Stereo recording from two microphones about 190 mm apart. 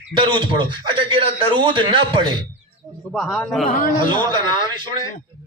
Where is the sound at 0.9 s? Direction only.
25° right (ahead or behind).